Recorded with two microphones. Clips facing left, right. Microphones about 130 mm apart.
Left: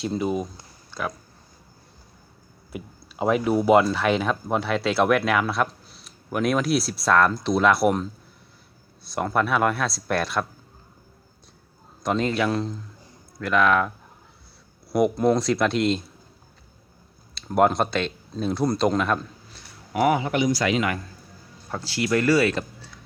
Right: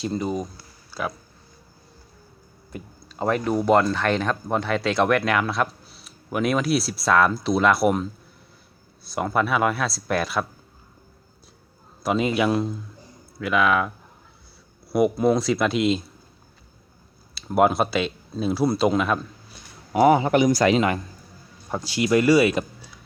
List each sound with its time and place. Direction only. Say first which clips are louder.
0.0 s speech: left 1 dB; centre (ahead or behind)
0.9 s a sound: right 1 dB; 5° right (ahead or behind)
2.7 s speech: left 1 dB; 5° left (ahead or behind)
12.0 s speech: right 2 dB; 10° right (ahead or behind)
17.3 s speech: right 1 dB; 5° right (ahead or behind)
19.9 s speech: right 5 dB; 30° right (ahead or behind)
20.7 s speech: right 3 dB; 30° right (ahead or behind)
21.7 s speech: right 3 dB; 15° right (ahead or behind)